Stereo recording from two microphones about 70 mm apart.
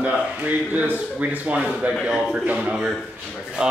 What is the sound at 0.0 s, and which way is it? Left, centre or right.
Speech, centre.